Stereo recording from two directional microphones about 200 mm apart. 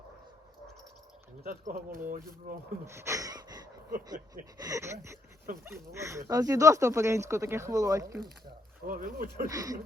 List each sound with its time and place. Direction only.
1.5 s speech: 45° right (ahead or behind)
2.8 s a sound: 15° right (ahead or behind)
3.9 s speech: 45° right (ahead or behind)
4.6 s speech: 15° right (ahead or behind)
8.8 s speech: 45° right (ahead or behind)
9.5 s speech: 15° right (ahead or behind)